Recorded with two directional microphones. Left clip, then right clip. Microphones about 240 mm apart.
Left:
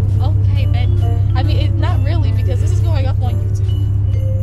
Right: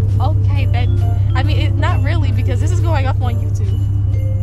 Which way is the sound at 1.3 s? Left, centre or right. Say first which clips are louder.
Right 3 dB; right.